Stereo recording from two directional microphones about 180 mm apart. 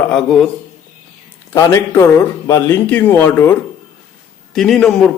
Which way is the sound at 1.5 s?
15° left (ahead or behind).